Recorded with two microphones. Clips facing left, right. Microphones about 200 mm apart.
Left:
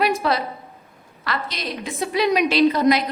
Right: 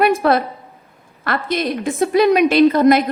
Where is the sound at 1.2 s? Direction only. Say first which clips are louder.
Right 8 dB; 55° right (ahead or behind).